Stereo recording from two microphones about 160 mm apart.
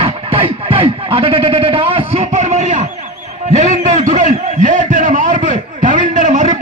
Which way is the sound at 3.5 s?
45° right (ahead or behind).